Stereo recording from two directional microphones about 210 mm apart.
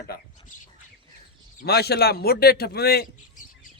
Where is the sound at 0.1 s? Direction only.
50° left (ahead or behind).